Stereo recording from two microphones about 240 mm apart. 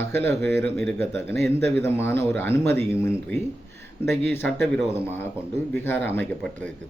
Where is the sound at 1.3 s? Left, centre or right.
Right.